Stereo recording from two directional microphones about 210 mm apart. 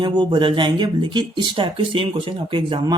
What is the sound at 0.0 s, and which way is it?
Speech, 20° right (ahead or behind).